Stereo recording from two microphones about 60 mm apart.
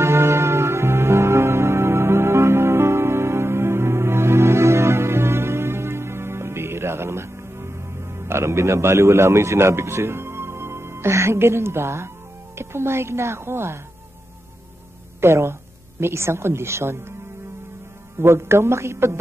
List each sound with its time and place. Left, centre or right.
0.0 s music: right
12.5 s a woman's voice: right
15.1 s a woman's voice: right
18.2 s a woman's voice: right